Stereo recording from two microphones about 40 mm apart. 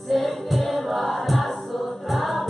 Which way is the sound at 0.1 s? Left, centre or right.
Centre.